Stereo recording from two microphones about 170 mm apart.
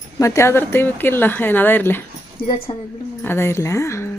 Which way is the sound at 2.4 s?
60° left (ahead or behind).